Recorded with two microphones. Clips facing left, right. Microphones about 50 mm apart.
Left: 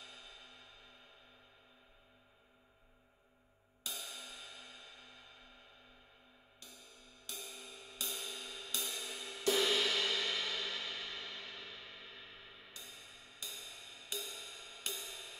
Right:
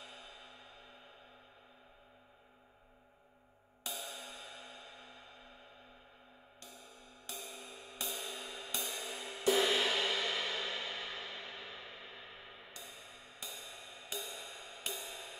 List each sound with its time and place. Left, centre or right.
0.0 s music: centre
4.0 s music: centre
7.2 s music: centre